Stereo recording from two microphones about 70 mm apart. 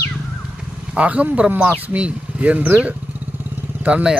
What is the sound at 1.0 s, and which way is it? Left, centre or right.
Speech, centre.